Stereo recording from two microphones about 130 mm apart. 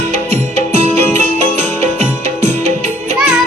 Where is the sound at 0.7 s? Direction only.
55° right (ahead or behind).